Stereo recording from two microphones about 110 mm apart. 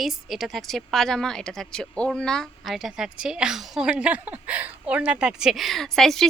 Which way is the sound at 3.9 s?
15° right (ahead or behind).